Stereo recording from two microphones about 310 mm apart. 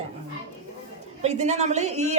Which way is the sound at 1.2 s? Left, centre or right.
Right.